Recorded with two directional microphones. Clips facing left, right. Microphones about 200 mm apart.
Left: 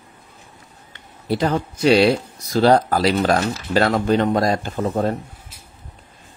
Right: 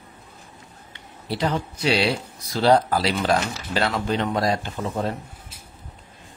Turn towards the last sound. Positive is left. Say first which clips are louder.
# left 6 dB
turn(degrees=45)  # may be behind; listen again after turning